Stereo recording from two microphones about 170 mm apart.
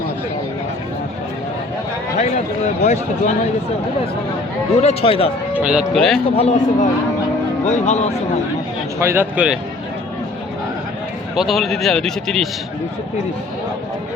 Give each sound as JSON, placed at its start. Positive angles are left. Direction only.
{"t": 2.8, "sound": "speech", "side_deg": 40}
{"t": 4.8, "sound": "speech", "side_deg": 35}
{"t": 5.5, "sound": "a man's voice", "side_deg": -5}
{"t": 6.3, "sound": "speech", "side_deg": 40}
{"t": 9.0, "sound": "speech", "side_deg": -15}
{"t": 11.3, "sound": "a man's voice", "side_deg": 0}